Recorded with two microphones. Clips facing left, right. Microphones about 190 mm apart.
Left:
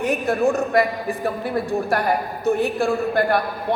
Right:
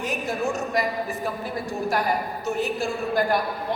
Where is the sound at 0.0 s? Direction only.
60° left (ahead or behind).